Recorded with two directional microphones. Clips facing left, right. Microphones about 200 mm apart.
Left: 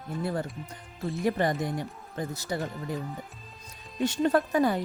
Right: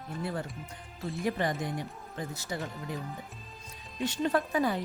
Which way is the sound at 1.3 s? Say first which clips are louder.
Left 4 dB; 45° left (ahead or behind).